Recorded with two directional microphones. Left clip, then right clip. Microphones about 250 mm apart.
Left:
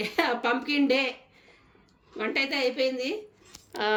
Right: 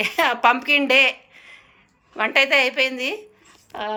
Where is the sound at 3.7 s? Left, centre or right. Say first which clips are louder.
Even; centre.